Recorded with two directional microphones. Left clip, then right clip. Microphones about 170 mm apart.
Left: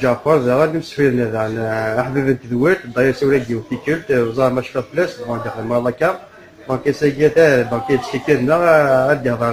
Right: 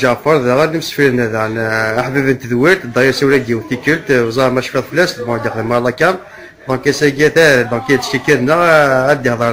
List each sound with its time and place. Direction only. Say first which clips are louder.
0.0 s speech: right 3 dB; 15° right (ahead or behind)